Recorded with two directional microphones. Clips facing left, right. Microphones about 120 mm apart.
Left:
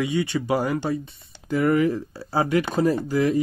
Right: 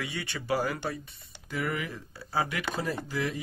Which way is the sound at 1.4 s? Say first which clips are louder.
Left 13 dB; 40° left (ahead or behind).